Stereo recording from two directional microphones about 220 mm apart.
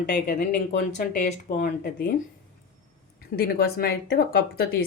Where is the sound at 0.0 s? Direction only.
40° left (ahead or behind).